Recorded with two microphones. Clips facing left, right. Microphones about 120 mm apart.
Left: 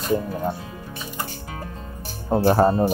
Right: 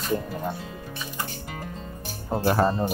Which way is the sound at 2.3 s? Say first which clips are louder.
Left 5 dB; 35° left (ahead or behind).